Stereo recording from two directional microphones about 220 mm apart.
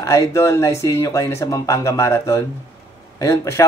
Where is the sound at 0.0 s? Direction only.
15° left (ahead or behind).